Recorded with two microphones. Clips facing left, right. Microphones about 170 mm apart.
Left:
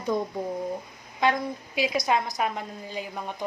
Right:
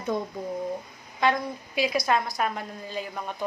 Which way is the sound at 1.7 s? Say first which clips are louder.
Right 1 dB; 15° left (ahead or behind).